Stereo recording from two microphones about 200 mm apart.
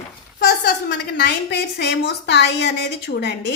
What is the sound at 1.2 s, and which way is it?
A woman's voice, 60° left (ahead or behind).